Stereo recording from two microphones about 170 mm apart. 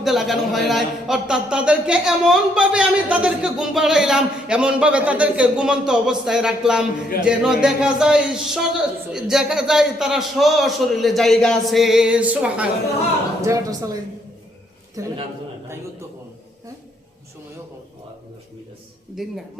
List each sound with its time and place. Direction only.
0.0 s a man's voice: centre (ahead or behind)
13.4 s speech: 20° right (ahead or behind)
15.0 s speech: 20° right (ahead or behind)
19.2 s a man's voice: centre (ahead or behind)